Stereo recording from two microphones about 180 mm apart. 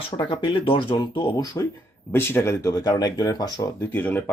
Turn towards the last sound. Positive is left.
turn(degrees=10)  # may be behind; listen again after turning